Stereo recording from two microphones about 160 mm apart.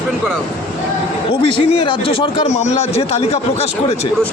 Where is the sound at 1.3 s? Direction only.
35° left (ahead or behind).